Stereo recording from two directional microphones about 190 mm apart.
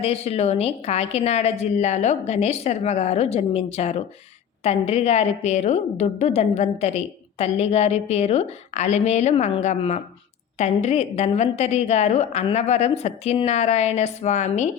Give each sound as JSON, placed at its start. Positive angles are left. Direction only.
{"t": 0.0, "sound": "a woman's voice", "side_deg": 30}